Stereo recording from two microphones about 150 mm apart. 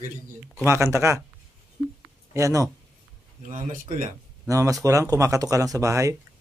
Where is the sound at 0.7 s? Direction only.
20° right (ahead or behind).